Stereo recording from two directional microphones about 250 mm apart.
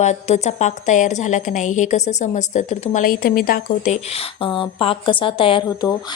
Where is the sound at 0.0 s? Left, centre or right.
Left.